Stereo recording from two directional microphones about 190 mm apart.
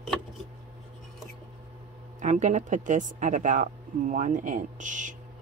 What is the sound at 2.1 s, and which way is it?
Speech, 40° right (ahead or behind).